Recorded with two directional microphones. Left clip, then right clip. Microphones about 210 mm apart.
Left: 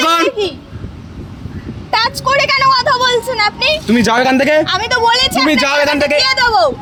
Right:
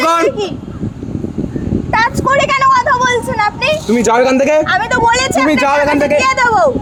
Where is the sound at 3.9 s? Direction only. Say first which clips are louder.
Right 2 dB; 65° left (ahead or behind).